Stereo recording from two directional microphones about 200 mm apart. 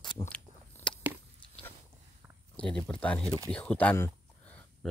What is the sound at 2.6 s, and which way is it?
Speech, 5° left (ahead or behind).